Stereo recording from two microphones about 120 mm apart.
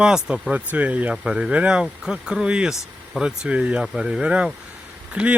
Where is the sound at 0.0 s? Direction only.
5° right (ahead or behind).